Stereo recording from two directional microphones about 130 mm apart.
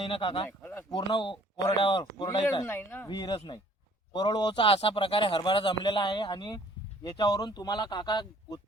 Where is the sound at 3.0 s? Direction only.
35° left (ahead or behind).